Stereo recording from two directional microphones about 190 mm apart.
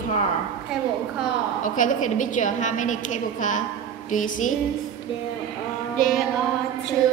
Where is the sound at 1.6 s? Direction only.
45° left (ahead or behind).